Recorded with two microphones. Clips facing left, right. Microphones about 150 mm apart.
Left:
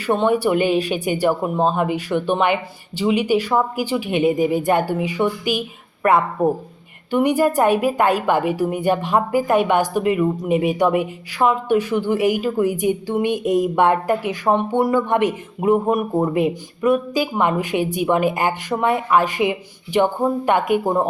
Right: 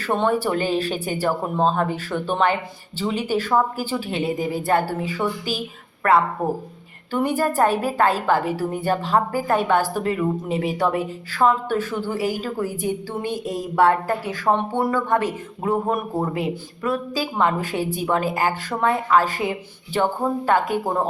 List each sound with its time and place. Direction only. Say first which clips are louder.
0.0 s speech: left 3 dB; 10° left (ahead or behind)